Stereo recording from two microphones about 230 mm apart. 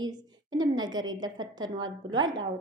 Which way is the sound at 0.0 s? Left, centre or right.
Centre.